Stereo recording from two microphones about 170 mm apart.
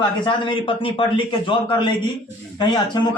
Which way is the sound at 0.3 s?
30° left (ahead or behind).